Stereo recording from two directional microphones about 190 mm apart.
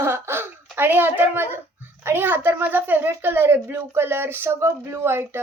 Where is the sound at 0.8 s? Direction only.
10° right (ahead or behind).